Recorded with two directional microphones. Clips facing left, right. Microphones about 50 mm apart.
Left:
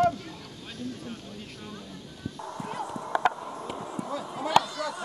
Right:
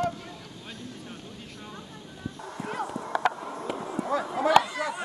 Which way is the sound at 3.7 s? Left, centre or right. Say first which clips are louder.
Right 6 dB; right.